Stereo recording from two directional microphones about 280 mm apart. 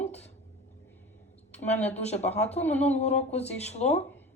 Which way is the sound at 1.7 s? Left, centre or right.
Left.